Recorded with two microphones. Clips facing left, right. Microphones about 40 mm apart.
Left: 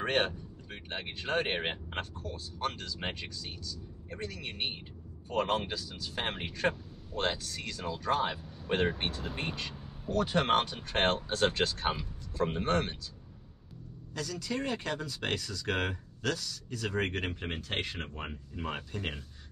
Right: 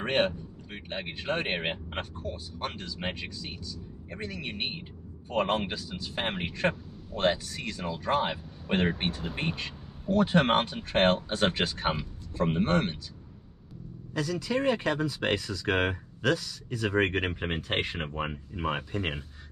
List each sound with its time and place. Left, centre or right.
0.0 s speech: centre
6.7 s a sound: centre
7.2 s speech: right
8.4 s speech: centre
10.1 s speech: right
14.1 s speech: centre